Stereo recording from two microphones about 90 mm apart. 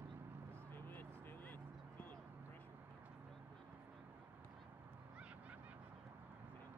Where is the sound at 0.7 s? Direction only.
20° left (ahead or behind).